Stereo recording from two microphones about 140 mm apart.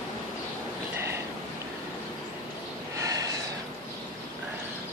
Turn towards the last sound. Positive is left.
turn(degrees=-25)  # may be behind; listen again after turning